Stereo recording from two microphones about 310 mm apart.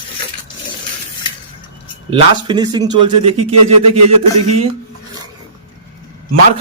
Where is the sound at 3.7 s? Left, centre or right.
Centre.